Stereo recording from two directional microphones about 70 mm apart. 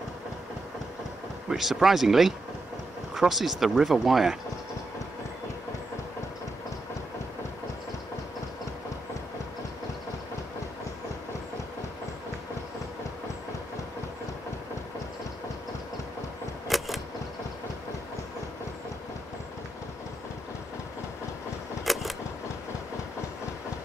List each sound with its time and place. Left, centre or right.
1.5 s speech: centre
16.6 s keys jangling: centre
21.8 s a sound: centre